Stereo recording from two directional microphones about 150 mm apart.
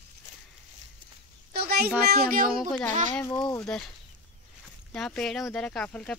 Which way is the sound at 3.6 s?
5° left (ahead or behind).